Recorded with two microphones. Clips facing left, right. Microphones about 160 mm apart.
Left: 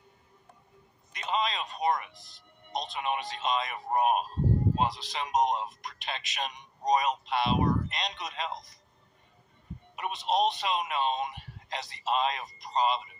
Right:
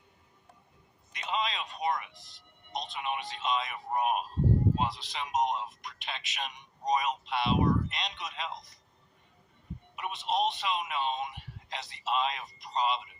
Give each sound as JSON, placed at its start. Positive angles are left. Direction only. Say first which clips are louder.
{"t": 1.1, "sound": "a man's voice", "louder": "left 3 dB", "side_deg": 40}
{"t": 9.9, "sound": "a man's voice", "louder": "left 3 dB", "side_deg": 40}